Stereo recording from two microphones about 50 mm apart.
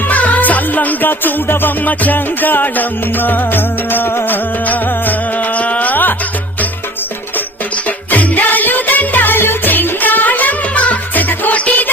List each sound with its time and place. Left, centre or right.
0.1 s music: left
8.1 s music: left